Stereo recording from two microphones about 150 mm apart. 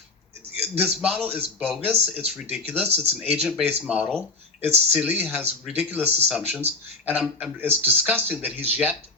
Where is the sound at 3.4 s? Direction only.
5° right (ahead or behind).